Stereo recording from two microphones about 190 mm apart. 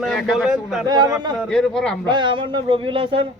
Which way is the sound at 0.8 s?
20° right (ahead or behind).